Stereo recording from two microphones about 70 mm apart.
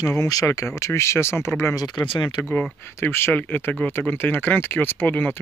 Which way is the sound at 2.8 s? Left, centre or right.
Left.